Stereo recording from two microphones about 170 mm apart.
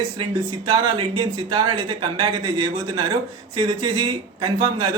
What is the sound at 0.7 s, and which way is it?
Speech, 30° right (ahead or behind).